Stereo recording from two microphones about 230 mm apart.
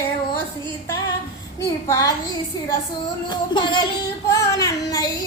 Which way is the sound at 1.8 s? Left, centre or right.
Centre.